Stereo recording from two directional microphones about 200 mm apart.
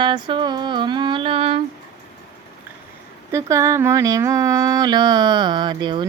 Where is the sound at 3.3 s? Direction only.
15° right (ahead or behind).